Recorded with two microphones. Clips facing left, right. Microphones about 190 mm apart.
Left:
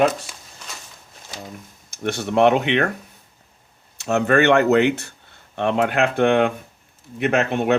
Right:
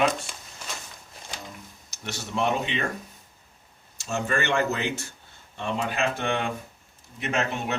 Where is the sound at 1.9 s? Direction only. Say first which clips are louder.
Left 11 dB; 55° left (ahead or behind).